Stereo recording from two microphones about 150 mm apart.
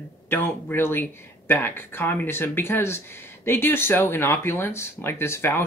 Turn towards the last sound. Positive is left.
turn(degrees=15)  # may be behind; listen again after turning